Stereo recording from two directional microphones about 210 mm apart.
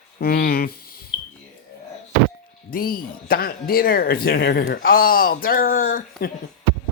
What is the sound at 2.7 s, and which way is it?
Speech, 45° left (ahead or behind).